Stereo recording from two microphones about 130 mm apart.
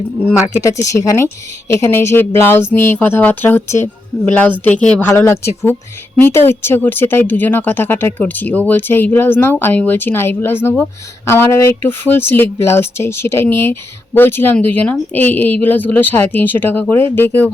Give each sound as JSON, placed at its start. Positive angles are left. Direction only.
{"t": 0.6, "sound": "speech", "side_deg": 25}